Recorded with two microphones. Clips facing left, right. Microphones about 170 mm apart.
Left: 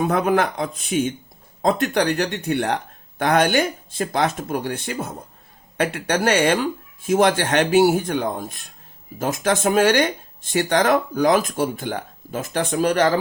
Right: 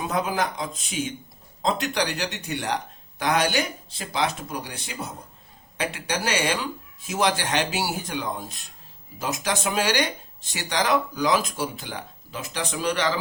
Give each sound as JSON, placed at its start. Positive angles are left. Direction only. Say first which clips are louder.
{"t": 0.0, "sound": "speech", "louder": "left 7 dB", "side_deg": 60}